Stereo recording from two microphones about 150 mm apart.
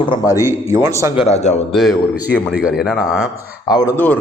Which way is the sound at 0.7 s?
20° right (ahead or behind).